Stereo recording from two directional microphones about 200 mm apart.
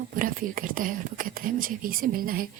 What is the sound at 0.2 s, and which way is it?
Speech, 45° right (ahead or behind).